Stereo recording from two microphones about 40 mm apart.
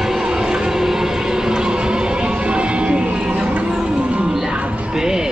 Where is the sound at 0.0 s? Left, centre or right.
Centre.